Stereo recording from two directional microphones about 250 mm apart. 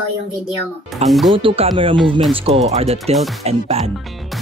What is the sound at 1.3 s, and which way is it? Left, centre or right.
Speech, right.